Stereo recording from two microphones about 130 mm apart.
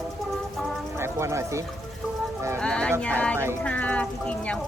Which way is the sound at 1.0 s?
20° right (ahead or behind).